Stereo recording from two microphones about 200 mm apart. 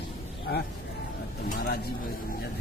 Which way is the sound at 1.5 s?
55° left (ahead or behind).